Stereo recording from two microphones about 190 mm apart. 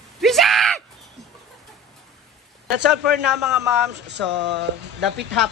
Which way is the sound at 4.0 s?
65° right (ahead or behind).